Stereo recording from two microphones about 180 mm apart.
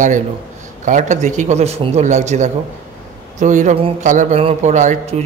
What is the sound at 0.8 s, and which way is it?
Speech, 45° right (ahead or behind).